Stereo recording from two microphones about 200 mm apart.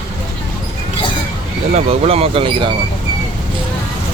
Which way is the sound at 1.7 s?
30° right (ahead or behind).